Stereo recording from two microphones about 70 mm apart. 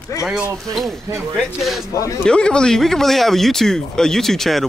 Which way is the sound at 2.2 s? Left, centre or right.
Centre.